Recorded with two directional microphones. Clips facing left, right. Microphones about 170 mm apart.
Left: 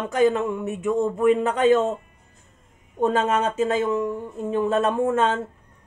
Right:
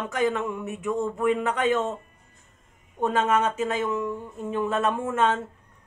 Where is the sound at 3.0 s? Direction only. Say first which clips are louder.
Left 2 dB; 30° left (ahead or behind).